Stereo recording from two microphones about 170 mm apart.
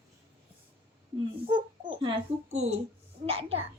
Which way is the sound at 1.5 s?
30° right (ahead or behind).